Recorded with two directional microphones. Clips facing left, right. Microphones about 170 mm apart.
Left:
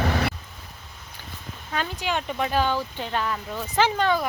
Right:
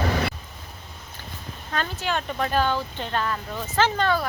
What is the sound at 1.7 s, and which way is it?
Speech, 10° left (ahead or behind).